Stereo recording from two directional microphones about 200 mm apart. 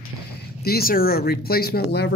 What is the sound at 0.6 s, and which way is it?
Speech, 50° left (ahead or behind).